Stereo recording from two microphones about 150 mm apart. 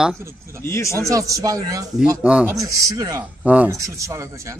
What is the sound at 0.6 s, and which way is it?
Speech, 20° left (ahead or behind).